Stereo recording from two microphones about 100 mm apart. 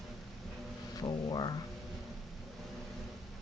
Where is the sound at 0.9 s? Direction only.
45° left (ahead or behind).